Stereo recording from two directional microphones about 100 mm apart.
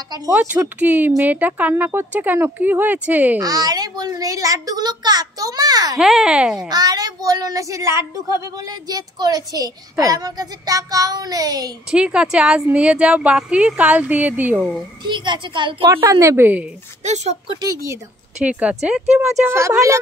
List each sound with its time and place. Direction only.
0.3 s speech: 20° right (ahead or behind)
3.3 s a woman's voice: 40° right (ahead or behind)
5.9 s speech: 5° right (ahead or behind)
6.7 s a woman's voice: 40° right (ahead or behind)
11.9 s speech: 10° right (ahead or behind)
15.0 s a woman's voice: 50° right (ahead or behind)
15.9 s a woman's voice: 30° right (ahead or behind)
17.6 s a woman's voice: 35° right (ahead or behind)
18.4 s speech: 15° right (ahead or behind)
19.4 s a woman's voice: 25° right (ahead or behind)